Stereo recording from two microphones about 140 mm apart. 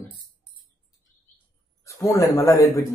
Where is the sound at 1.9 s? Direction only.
25° left (ahead or behind).